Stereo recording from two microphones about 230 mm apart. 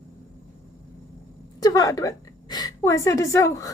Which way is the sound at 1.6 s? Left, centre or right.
Centre.